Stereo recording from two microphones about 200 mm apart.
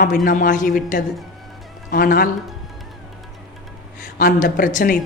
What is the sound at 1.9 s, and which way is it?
Speech, 45° left (ahead or behind).